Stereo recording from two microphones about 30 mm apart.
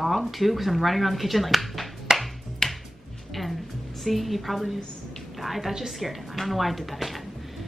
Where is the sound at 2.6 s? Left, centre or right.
Centre.